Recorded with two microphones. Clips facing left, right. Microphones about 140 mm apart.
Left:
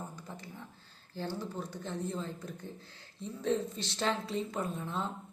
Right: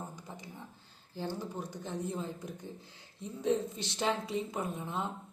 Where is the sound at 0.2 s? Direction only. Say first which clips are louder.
Left 1 dB; 15° right (ahead or behind).